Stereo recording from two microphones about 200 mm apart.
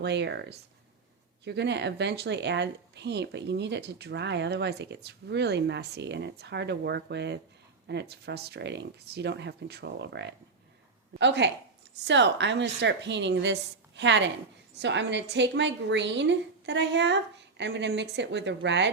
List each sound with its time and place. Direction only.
0.0 s speech: 60° right (ahead or behind)